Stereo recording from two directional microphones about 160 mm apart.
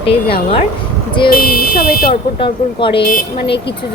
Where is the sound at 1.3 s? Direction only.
70° left (ahead or behind).